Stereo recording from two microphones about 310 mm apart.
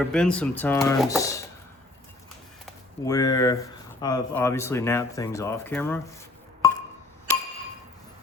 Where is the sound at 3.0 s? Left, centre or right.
Centre.